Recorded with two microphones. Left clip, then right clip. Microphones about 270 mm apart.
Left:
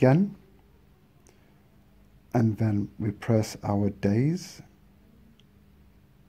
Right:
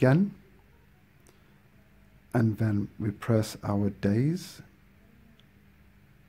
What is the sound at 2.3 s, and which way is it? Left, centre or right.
Speech, centre.